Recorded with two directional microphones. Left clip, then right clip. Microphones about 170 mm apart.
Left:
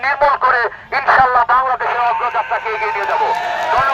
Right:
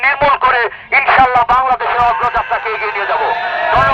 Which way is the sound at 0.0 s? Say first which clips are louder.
Right 2 dB; 30° right (ahead or behind).